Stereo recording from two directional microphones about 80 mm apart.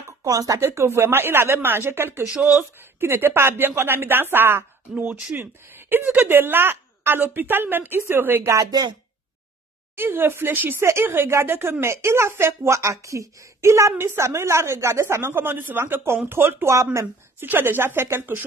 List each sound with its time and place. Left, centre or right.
0.2 s speech: right
0.6 s speech: right
2.2 s speech: centre
4.9 s speech: centre
8.6 s speech: right
9.9 s a woman's voice: right